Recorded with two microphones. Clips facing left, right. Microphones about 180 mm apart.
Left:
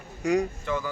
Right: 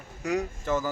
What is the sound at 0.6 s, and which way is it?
Speech, 40° right (ahead or behind).